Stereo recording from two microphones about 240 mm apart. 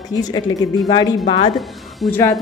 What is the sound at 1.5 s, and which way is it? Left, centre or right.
Speech, centre.